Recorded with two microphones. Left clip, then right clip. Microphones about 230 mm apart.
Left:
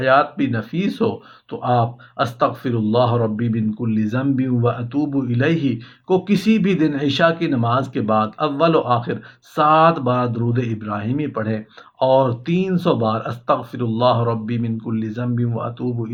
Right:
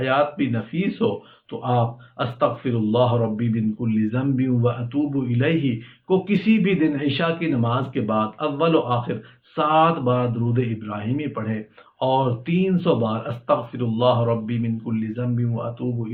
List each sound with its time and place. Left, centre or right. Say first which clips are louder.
0.0 s speech: left 5 dB; left